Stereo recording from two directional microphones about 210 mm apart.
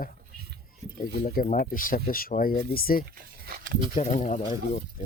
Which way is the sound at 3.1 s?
45° right (ahead or behind).